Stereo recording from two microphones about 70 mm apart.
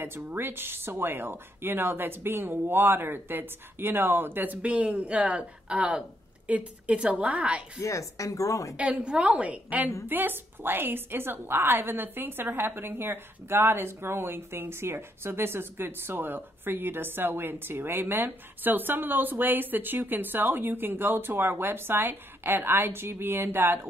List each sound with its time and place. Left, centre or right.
0.0 s a woman's voice: right
7.8 s speech: left
8.7 s a woman's voice: centre; by 23.9 s right